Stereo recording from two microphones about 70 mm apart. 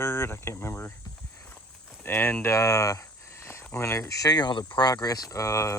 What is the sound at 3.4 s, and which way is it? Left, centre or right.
Speech, left.